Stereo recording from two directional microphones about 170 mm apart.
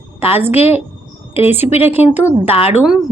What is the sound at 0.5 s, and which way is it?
A woman's voice, 35° left (ahead or behind).